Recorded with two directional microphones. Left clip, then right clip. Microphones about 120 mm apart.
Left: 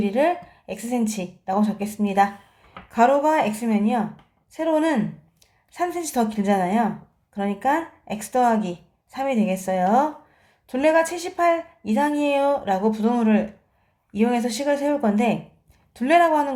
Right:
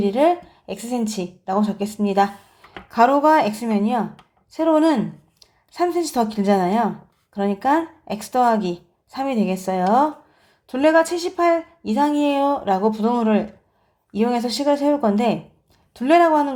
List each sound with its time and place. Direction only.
0.0 s a woman's voice: 40° right (ahead or behind)
1.8 s a woman's voice: 45° right (ahead or behind)